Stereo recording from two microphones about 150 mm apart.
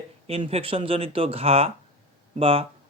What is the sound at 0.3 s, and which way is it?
Speech, 40° right (ahead or behind).